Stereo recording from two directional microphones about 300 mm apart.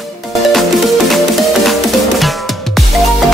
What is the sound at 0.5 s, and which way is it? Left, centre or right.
Music, centre.